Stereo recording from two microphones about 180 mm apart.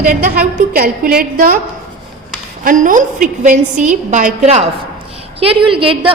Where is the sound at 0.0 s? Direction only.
45° right (ahead or behind).